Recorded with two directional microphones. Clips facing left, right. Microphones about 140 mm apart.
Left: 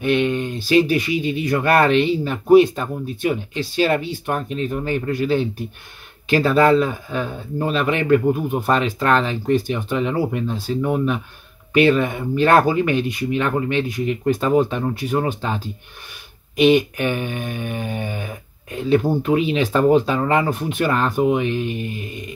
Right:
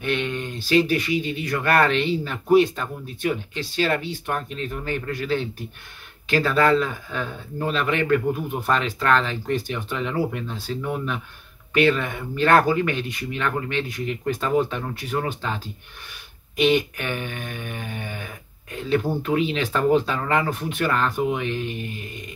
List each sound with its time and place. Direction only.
0.0 s speech: 15° left (ahead or behind)